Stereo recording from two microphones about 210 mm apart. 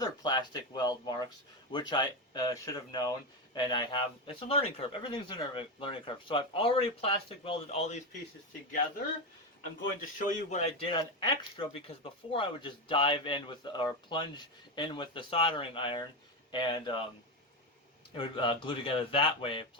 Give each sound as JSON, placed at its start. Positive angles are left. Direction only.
{"t": 0.0, "sound": "speech", "side_deg": 20}
{"t": 10.2, "sound": "speech", "side_deg": 35}
{"t": 18.1, "sound": "speech", "side_deg": 25}